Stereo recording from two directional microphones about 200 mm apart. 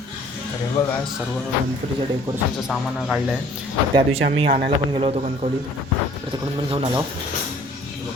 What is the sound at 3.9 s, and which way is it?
A man's voice, 30° right (ahead or behind).